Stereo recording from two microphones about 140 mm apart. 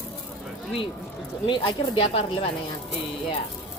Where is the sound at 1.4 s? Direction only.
40° left (ahead or behind).